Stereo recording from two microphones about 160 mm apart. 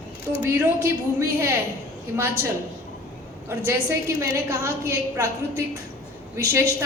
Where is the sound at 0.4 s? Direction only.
15° right (ahead or behind).